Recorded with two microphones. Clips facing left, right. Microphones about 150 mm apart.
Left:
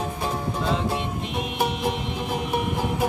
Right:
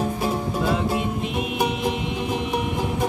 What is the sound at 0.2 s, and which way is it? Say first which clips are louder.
Music: right 3 dB; 10° right (ahead or behind).